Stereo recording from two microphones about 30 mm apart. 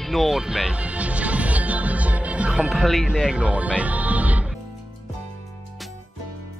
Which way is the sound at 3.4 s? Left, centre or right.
Right.